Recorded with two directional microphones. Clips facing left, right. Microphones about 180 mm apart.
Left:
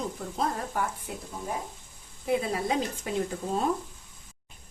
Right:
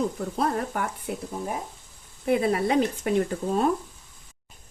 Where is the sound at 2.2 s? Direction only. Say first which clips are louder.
Right 5 dB; 65° right (ahead or behind).